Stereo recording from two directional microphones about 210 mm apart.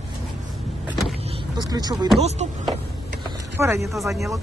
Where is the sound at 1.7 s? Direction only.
20° right (ahead or behind).